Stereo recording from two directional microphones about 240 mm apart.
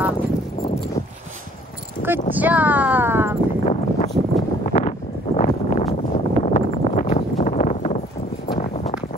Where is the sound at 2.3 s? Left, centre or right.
Centre.